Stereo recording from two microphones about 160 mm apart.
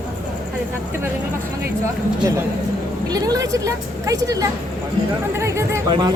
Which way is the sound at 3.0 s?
25° right (ahead or behind).